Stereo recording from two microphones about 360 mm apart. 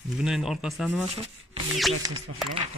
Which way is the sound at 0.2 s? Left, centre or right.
Centre.